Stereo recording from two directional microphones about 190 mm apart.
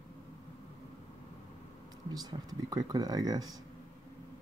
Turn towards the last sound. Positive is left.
turn(degrees=-20)  # may be behind; listen again after turning